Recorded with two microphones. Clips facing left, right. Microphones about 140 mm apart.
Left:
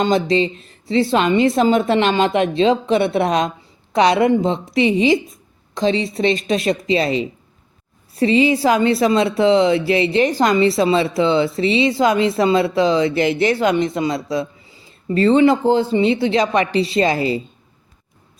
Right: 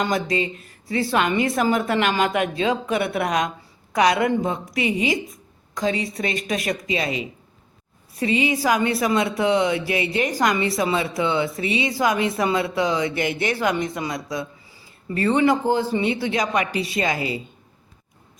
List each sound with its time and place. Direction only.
0.0 s a woman's voice: 25° left (ahead or behind)